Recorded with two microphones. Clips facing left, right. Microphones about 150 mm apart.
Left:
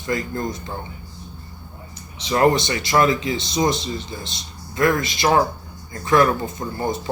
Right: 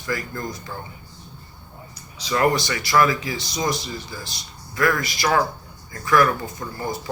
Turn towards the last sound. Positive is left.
turn(degrees=25)  # may be behind; listen again after turning